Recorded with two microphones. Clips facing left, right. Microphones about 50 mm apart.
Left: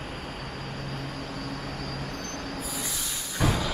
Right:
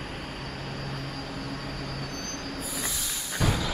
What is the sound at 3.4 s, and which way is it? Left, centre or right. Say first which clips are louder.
Music: left 2 dB; centre.